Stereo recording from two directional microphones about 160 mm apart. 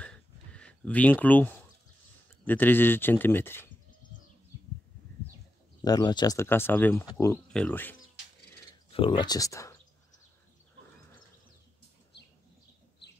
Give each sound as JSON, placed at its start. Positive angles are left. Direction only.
{"t": 0.0, "sound": "a sound", "side_deg": 5}
{"t": 2.4, "sound": "speech", "side_deg": 10}
{"t": 5.9, "sound": "speech", "side_deg": 25}
{"t": 7.4, "sound": "speech", "side_deg": 5}
{"t": 8.9, "sound": "speech", "side_deg": 35}